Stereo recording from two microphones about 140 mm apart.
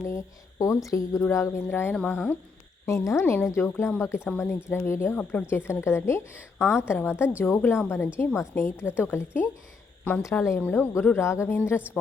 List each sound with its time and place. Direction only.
0.0 s a woman's voice: 20° left (ahead or behind)